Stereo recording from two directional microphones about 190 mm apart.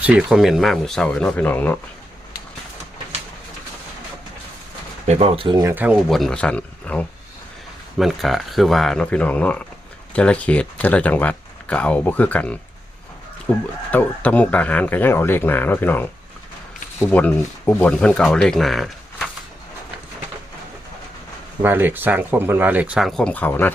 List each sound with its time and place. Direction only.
0.0 s speech: 5° right (ahead or behind)
5.0 s speech: 35° right (ahead or behind)
5.7 s speech: 10° right (ahead or behind)
21.6 s speech: 10° right (ahead or behind); by 23.7 s 10° left (ahead or behind)